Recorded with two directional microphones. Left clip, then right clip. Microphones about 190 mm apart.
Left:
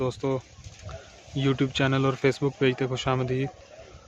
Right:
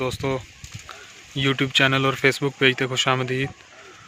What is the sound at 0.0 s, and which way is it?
Speech, 5° left (ahead or behind).